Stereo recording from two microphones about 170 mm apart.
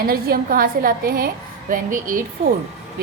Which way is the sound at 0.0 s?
60° right (ahead or behind).